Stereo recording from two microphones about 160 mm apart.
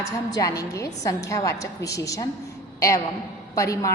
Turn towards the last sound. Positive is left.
turn(degrees=20)  # may be behind; listen again after turning